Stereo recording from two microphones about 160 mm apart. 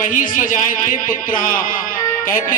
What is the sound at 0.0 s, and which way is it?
A man's voice, 55° left (ahead or behind).